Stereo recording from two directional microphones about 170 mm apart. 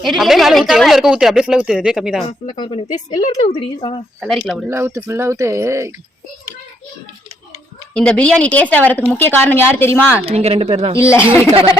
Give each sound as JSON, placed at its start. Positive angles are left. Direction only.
{"t": 0.0, "sound": "speech", "side_deg": 0}
{"t": 2.6, "sound": "speech", "side_deg": 35}
{"t": 4.2, "sound": "speech", "side_deg": 0}
{"t": 4.7, "sound": "speech", "side_deg": -15}
{"t": 7.9, "sound": "speech", "side_deg": 5}
{"t": 10.2, "sound": "speech", "side_deg": -35}
{"t": 10.9, "sound": "speech", "side_deg": 15}
{"t": 11.3, "sound": "speech", "side_deg": -5}